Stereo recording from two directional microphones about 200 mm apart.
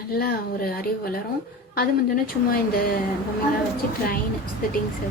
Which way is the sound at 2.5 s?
50° left (ahead or behind).